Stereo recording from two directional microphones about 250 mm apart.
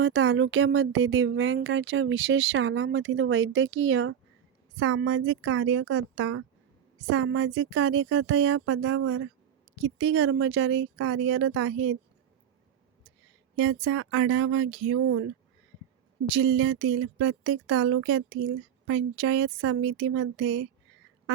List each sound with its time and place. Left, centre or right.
0.0 s speech: right
13.6 s speech: right
16.4 s speech: right